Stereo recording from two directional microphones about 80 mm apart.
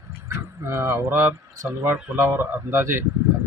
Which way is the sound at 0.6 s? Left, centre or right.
Right.